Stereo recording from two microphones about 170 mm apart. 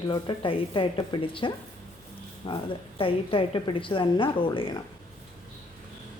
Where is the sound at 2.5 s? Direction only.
30° left (ahead or behind).